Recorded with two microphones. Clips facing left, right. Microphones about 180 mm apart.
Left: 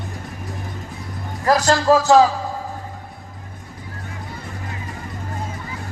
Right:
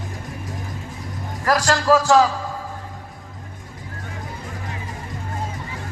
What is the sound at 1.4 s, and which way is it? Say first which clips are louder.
Speech: left 3 dB; 25° left (ahead or behind).